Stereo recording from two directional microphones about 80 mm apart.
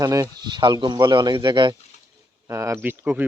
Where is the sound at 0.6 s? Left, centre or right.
Right.